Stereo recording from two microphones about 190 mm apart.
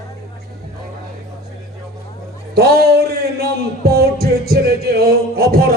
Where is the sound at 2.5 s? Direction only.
55° right (ahead or behind).